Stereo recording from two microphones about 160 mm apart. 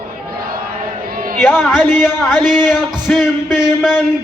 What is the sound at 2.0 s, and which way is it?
Speech, centre (ahead or behind).